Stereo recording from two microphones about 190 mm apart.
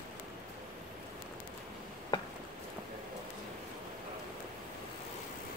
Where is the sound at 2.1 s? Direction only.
25° left (ahead or behind).